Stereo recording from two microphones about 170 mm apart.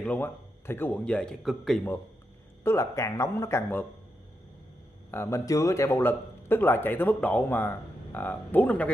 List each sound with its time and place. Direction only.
0.0 s speech: 10° left (ahead or behind)
2.6 s speech: 15° left (ahead or behind)
5.1 s speech: 15° left (ahead or behind)